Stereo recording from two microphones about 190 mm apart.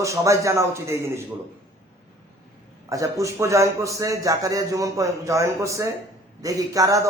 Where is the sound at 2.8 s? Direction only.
15° right (ahead or behind).